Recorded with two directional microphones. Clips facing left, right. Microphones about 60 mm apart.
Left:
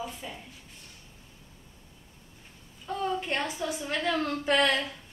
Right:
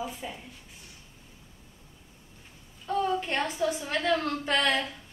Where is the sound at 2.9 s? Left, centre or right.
Centre.